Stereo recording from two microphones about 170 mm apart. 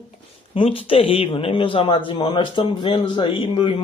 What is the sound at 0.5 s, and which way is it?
Speech, 35° left (ahead or behind).